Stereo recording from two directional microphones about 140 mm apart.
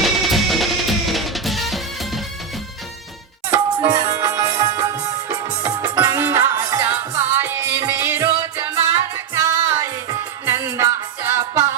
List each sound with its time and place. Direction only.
0.0 s music: centre (ahead or behind)
3.8 s music: 20° right (ahead or behind)